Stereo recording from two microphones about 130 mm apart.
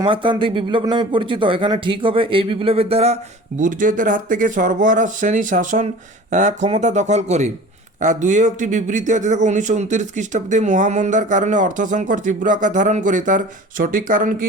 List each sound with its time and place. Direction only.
0.0 s speech: 40° right (ahead or behind)
3.6 s speech: 90° right
6.3 s a man's voice: 75° right (ahead or behind); by 14.4 s 90° right